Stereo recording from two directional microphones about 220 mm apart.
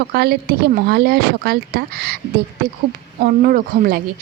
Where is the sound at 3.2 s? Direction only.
40° right (ahead or behind).